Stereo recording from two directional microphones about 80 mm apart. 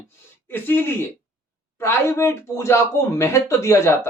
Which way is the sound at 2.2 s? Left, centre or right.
Left.